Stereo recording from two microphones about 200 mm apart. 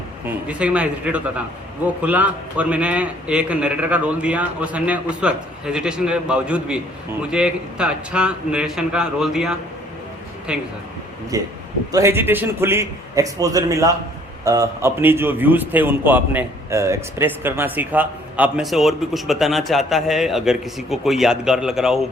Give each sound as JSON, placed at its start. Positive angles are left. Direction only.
{"t": 0.3, "sound": "a man's voice", "side_deg": -5}
{"t": 11.3, "sound": "a man's voice", "side_deg": -15}